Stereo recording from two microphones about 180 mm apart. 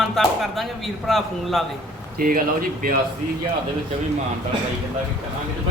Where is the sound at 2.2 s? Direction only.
50° right (ahead or behind).